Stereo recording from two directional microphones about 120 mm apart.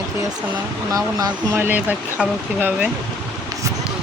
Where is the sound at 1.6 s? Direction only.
15° right (ahead or behind).